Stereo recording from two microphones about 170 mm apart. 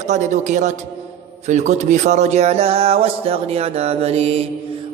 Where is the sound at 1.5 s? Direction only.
45° right (ahead or behind).